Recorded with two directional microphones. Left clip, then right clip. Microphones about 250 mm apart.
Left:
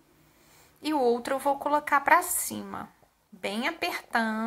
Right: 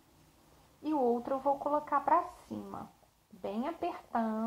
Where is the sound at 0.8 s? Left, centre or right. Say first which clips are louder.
Left 6 dB; left.